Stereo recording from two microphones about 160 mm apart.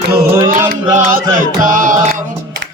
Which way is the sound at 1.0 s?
55° right (ahead or behind).